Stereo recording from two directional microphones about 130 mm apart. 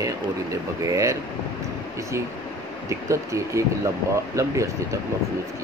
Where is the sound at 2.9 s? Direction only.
25° right (ahead or behind).